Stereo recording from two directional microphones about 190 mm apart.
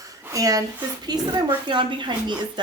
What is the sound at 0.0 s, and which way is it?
A woman's voice, 20° right (ahead or behind).